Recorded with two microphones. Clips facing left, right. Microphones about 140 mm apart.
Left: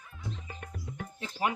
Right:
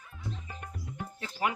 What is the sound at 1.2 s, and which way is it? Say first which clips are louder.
Music: left 1 dB; 25° left (ahead or behind).